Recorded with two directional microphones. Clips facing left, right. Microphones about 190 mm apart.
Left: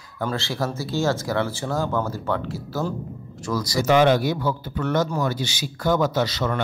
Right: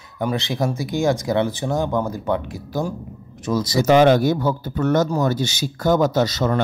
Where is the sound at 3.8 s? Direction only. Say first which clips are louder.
Right 4 dB; 45° right (ahead or behind).